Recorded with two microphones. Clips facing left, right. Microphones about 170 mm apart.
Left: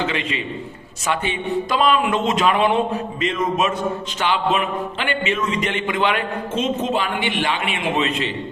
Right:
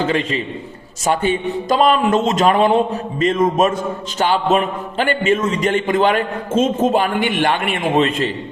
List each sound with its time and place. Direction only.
0.0 s a man's voice: 45° right (ahead or behind)